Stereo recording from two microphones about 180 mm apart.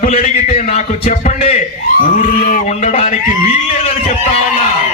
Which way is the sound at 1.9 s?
50° left (ahead or behind).